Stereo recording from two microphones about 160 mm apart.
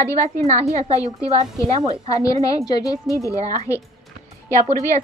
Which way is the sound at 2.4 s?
25° left (ahead or behind).